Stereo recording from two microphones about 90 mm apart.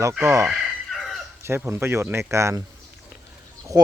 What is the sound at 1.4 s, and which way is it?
Speech, 30° right (ahead or behind).